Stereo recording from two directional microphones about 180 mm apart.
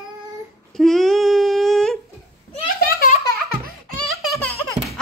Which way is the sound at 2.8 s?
55° left (ahead or behind).